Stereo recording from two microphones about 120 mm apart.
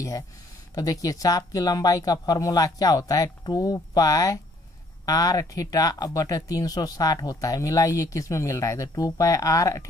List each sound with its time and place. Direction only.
0.7 s speech: 30° left (ahead or behind)